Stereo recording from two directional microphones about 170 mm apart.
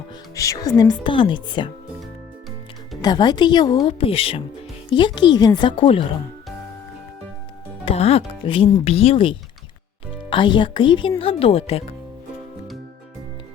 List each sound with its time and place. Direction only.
0.3 s speech: 20° left (ahead or behind)
3.0 s speech: 25° left (ahead or behind)
7.9 s speech: 35° left (ahead or behind)